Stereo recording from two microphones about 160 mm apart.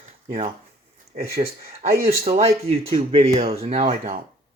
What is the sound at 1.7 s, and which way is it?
Speech, 40° right (ahead or behind).